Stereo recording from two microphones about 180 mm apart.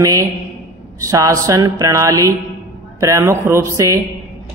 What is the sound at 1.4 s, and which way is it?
Mantra, 15° right (ahead or behind).